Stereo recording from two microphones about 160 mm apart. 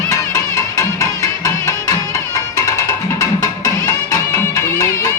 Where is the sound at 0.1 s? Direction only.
20° left (ahead or behind).